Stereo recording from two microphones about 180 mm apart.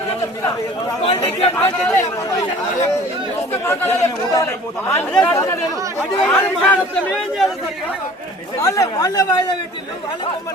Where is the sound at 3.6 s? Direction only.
15° left (ahead or behind).